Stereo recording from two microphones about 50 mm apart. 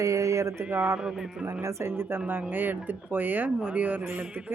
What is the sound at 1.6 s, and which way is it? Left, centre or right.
Speech, right.